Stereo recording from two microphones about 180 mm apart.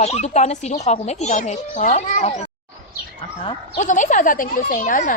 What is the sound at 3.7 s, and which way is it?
Speech, 45° left (ahead or behind).